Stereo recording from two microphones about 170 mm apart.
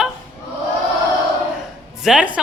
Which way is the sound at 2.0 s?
5° right (ahead or behind).